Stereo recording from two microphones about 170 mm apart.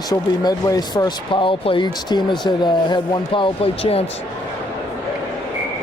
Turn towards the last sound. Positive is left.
turn(degrees=35)  # may be behind; listen again after turning